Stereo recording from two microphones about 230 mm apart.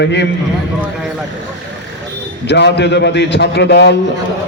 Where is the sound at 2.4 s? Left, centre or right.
Left.